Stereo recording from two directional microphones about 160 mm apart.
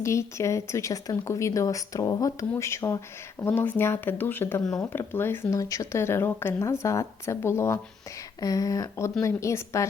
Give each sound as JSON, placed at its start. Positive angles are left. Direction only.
{"t": 0.0, "sound": "a woman's voice", "side_deg": 20}